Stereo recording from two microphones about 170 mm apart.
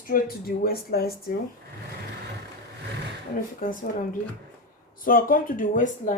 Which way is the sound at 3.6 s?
60° left (ahead or behind).